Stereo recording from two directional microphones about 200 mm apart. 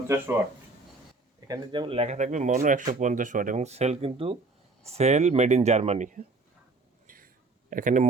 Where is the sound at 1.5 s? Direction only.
25° right (ahead or behind).